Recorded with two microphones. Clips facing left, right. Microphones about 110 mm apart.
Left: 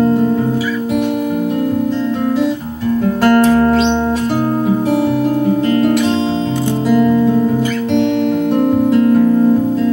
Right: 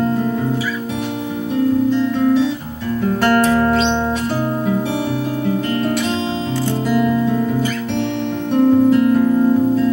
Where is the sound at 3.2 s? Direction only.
35° left (ahead or behind).